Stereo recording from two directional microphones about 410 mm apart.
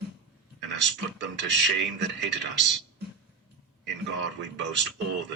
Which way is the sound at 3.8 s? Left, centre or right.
Right.